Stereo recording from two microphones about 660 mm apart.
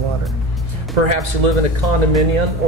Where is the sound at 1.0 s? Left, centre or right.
Right.